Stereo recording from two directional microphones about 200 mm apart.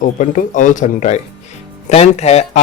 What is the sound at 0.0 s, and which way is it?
Speech, 40° left (ahead or behind).